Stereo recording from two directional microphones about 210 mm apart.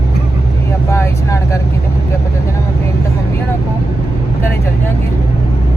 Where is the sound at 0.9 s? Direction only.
15° left (ahead or behind).